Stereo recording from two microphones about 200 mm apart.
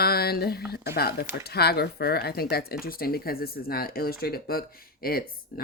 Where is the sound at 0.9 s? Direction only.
50° left (ahead or behind).